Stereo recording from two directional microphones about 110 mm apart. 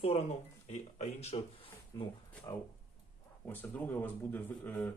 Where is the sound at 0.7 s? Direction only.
85° left.